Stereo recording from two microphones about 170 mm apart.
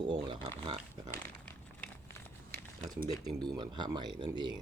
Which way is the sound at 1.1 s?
10° left (ahead or behind).